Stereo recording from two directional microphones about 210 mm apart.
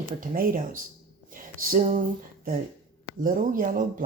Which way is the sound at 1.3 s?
40° right (ahead or behind).